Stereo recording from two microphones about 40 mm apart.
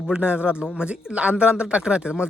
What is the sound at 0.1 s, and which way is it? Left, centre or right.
A man's voice, right.